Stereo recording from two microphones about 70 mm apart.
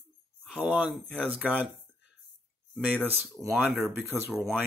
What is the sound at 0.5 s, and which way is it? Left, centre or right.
Speech, centre.